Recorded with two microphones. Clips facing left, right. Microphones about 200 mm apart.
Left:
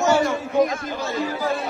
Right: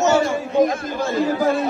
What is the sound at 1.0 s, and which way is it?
Speech, 50° right (ahead or behind).